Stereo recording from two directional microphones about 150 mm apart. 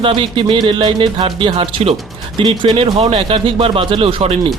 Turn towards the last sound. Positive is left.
turn(degrees=-40)  # may be behind; listen again after turning